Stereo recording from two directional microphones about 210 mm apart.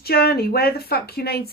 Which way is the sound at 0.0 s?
50° left (ahead or behind).